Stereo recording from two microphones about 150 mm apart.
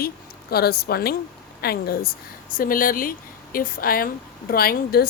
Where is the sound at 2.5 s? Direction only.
70° left (ahead or behind).